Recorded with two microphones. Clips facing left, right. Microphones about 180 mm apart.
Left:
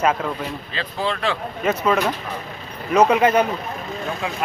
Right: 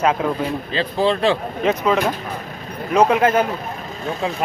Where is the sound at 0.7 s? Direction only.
30° right (ahead or behind).